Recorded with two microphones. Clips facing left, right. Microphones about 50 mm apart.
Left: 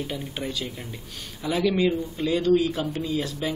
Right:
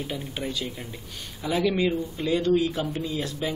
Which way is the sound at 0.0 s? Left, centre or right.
Centre.